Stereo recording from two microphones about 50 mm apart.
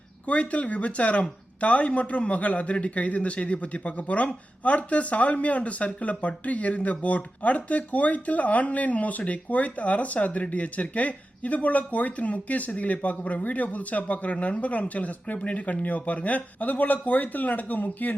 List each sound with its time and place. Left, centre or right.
0.3 s speech: left